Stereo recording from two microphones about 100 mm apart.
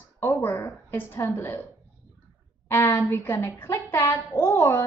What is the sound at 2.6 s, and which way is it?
A woman's voice, 25° left (ahead or behind).